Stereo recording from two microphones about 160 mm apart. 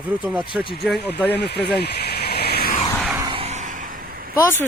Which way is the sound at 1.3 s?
90° left.